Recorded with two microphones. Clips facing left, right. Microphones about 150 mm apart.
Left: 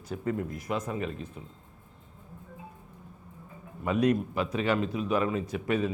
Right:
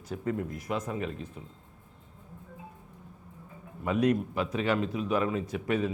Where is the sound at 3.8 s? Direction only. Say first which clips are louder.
Left 1 dB; 20° left (ahead or behind).